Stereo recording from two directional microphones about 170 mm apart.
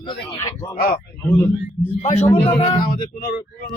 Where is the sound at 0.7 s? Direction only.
60° left (ahead or behind).